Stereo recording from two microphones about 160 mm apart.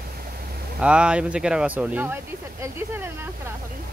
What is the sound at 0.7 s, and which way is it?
Speech, 5° right (ahead or behind).